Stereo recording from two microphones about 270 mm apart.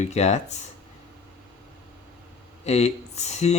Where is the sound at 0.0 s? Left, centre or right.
Left.